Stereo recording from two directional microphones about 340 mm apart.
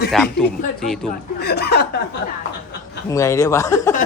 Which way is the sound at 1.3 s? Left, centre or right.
Left.